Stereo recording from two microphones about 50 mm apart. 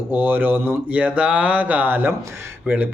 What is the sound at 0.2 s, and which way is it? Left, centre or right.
Speech, right.